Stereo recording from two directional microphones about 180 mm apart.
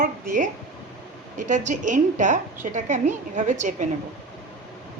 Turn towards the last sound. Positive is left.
turn(degrees=-45)  # may be behind; listen again after turning